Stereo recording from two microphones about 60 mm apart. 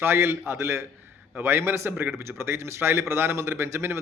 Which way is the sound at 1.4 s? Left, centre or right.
Right.